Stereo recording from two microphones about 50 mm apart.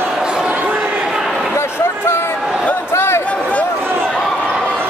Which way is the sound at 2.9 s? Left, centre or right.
Left.